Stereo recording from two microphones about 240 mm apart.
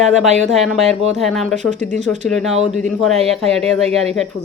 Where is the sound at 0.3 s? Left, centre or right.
Right.